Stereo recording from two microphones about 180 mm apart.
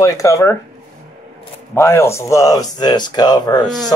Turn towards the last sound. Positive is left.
turn(degrees=25)  # may be behind; listen again after turning